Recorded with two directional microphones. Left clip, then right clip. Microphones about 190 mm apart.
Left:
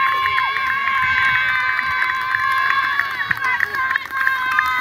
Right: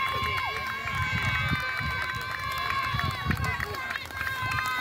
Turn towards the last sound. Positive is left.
turn(degrees=-65)  # may be behind; listen again after turning